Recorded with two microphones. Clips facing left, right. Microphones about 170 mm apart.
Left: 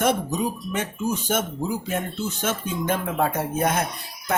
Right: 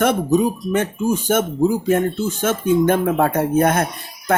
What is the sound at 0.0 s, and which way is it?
Speech, 55° right (ahead or behind).